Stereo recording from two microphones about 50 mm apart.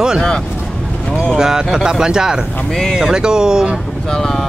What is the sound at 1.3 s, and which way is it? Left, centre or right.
Speech, centre.